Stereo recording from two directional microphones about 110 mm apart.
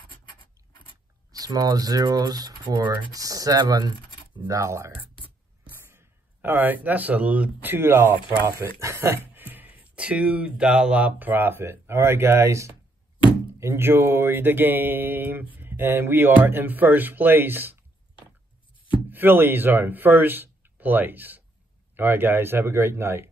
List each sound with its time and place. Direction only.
1.3 s speech: 35° right (ahead or behind); by 17.7 s 20° right (ahead or behind)
19.0 s speech: 20° right (ahead or behind)